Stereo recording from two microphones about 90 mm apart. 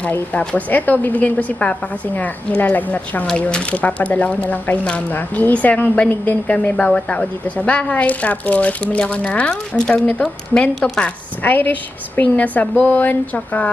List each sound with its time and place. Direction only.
0.1 s speech: 15° left (ahead or behind)